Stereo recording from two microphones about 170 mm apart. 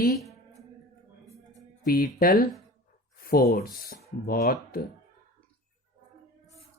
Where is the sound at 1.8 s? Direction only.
60° left (ahead or behind).